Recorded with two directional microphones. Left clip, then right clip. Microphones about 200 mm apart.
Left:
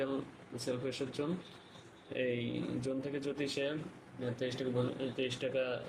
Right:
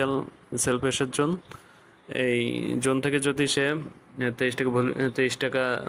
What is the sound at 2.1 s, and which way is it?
Speech, 25° right (ahead or behind).